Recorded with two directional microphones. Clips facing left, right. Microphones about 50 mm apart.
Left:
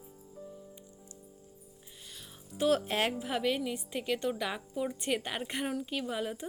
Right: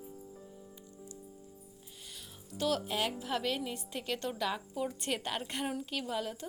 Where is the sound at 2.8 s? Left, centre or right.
Left.